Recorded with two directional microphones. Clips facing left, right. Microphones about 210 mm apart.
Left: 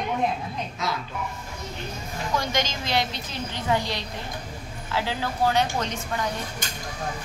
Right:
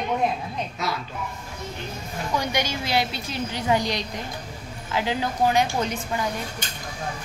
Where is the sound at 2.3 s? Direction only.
15° right (ahead or behind).